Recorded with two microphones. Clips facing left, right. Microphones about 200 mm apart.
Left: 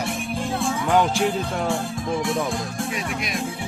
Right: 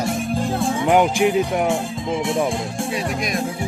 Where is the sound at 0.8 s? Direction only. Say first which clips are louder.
Right 4 dB; 20° right (ahead or behind).